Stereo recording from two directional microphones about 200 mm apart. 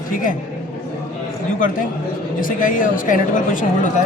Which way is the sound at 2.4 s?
45° left (ahead or behind).